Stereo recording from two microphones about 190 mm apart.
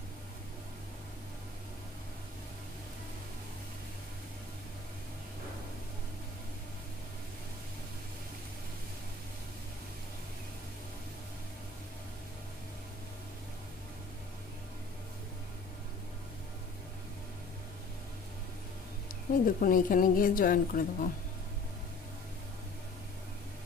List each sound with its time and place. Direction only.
19.0 s a woman's voice: 45° left (ahead or behind)